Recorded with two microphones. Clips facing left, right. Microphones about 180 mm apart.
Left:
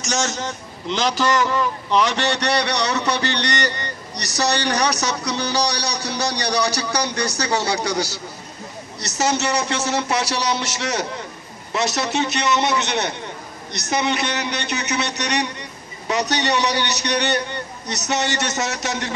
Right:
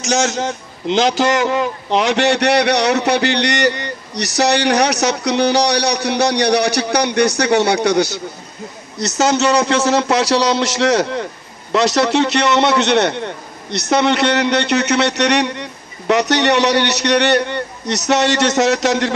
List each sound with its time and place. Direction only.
0.1 s a man's voice: 65° right (ahead or behind)
9.1 s a man's voice: 70° right (ahead or behind)